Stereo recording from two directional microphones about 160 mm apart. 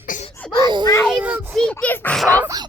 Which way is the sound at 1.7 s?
10° left (ahead or behind).